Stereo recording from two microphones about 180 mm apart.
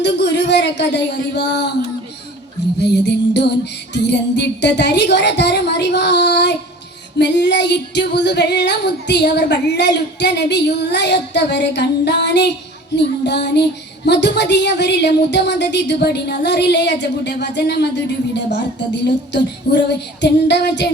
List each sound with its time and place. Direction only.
0.0 s child singing: 70° left (ahead or behind)
2.7 s child singing: 70° left (ahead or behind)